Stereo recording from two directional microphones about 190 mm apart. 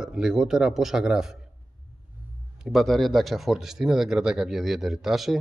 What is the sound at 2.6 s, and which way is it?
A man's voice, centre (ahead or behind).